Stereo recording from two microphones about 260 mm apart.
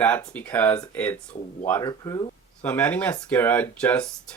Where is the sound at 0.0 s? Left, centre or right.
Centre.